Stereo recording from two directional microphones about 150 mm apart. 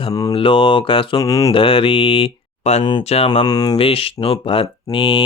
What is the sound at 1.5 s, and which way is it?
Speech, 35° left (ahead or behind).